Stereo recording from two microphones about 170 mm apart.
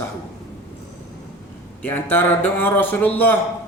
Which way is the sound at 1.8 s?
10° left (ahead or behind).